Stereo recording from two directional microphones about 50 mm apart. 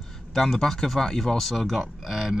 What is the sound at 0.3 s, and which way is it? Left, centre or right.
Speech, centre.